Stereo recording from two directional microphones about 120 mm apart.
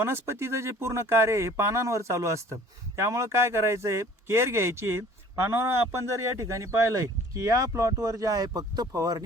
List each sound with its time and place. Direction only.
0.0 s speech: 20° right (ahead or behind)